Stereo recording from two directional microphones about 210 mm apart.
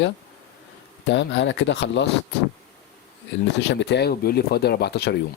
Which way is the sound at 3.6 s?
55° left (ahead or behind).